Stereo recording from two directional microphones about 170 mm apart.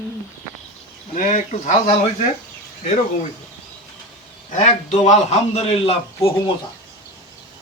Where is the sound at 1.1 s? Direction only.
45° left (ahead or behind).